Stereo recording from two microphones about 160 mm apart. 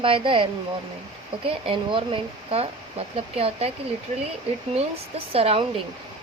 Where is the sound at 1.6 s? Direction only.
35° right (ahead or behind).